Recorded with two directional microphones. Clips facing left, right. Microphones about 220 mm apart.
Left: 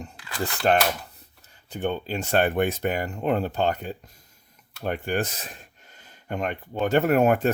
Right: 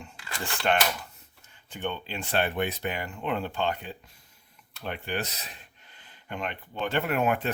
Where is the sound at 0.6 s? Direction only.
35° left (ahead or behind).